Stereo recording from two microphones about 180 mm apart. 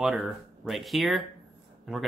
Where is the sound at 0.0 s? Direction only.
Centre (ahead or behind).